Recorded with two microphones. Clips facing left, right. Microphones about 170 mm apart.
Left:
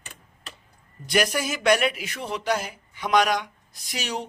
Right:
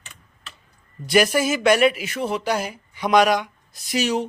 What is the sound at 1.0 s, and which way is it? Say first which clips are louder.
A man's voice: right 6 dB; 5° right (ahead or behind).